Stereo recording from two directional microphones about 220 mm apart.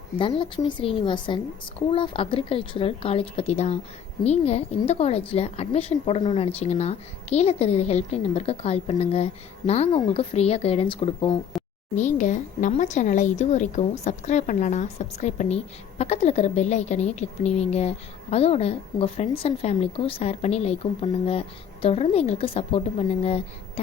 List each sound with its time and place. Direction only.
0.2 s a woman's voice: 25° left (ahead or behind)